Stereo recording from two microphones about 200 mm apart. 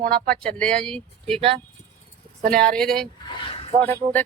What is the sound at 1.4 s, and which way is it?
Speech, 30° right (ahead or behind).